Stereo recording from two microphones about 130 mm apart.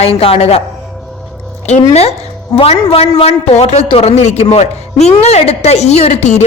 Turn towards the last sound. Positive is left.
turn(degrees=65)  # may be behind; listen again after turning